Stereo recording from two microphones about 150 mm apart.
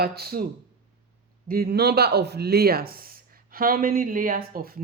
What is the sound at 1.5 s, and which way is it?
Speech, 90° right.